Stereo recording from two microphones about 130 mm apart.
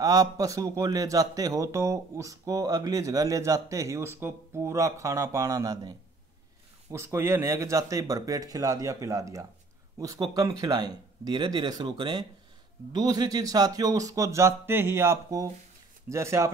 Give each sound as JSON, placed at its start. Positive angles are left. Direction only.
{"t": 0.0, "sound": "a man's voice", "side_deg": -30}